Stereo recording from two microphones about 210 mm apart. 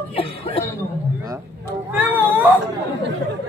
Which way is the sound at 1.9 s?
10° right (ahead or behind).